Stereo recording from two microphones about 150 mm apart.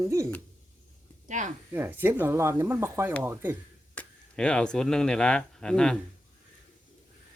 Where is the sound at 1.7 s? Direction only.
15° right (ahead or behind).